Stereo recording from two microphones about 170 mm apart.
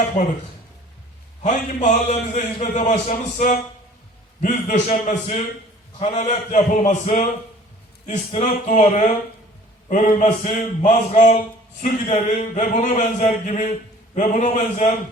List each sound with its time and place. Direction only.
1.4 s a man's voice: 45° left (ahead or behind)